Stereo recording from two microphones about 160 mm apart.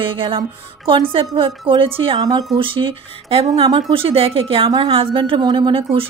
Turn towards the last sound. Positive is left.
turn(degrees=-35)  # may be behind; listen again after turning